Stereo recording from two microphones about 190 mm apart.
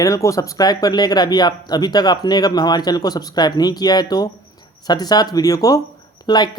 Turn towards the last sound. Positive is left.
turn(degrees=20)  # may be behind; listen again after turning